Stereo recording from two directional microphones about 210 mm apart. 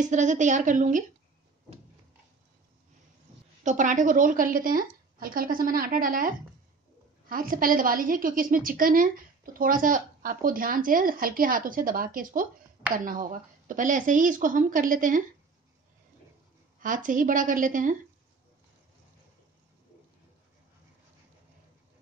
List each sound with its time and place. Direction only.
0.0 s a woman's voice: 35° right (ahead or behind)
3.6 s a woman's voice: 35° right (ahead or behind)
16.8 s a woman's voice: 40° right (ahead or behind)